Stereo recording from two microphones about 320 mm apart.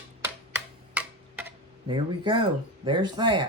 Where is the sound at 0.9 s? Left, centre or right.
Centre.